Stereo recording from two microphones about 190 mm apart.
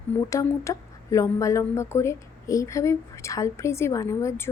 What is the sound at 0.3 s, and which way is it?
A woman's voice, 15° left (ahead or behind).